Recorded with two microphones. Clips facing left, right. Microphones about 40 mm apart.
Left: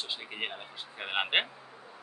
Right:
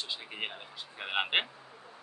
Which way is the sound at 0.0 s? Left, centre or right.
Centre.